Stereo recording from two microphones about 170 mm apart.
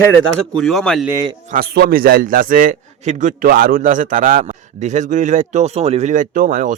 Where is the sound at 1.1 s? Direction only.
20° right (ahead or behind).